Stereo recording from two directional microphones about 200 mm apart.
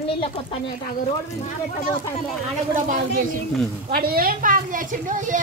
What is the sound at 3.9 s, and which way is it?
A woman's voice, 50° right (ahead or behind).